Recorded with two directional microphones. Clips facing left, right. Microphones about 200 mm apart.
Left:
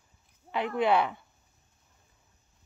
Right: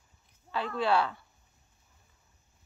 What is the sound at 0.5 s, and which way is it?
Speech, 20° left (ahead or behind).